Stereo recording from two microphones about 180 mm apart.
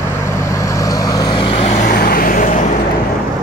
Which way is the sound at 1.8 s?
55° left (ahead or behind).